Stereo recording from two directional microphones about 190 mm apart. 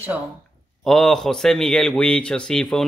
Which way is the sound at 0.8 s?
Centre (ahead or behind).